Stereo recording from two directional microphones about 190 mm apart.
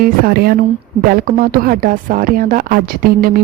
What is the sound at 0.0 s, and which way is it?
Speech, 55° right (ahead or behind).